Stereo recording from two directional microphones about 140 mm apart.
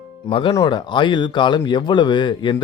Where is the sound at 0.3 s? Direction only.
40° left (ahead or behind).